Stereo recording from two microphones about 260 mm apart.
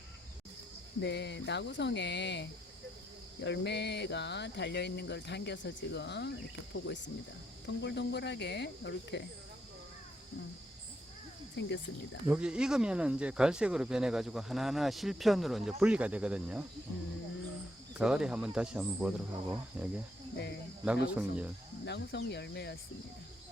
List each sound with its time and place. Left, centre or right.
1.0 s speech: left
11.6 s speech: left
12.3 s speech: centre
17.9 s speech: centre
20.3 s speech: left
20.8 s speech: centre
21.8 s speech: left